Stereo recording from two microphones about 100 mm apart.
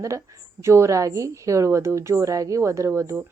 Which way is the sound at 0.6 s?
30° right (ahead or behind).